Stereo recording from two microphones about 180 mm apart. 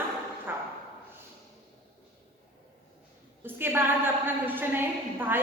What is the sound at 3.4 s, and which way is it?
A woman's voice, 10° right (ahead or behind).